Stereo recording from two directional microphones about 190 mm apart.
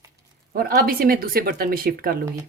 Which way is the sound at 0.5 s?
50° right (ahead or behind).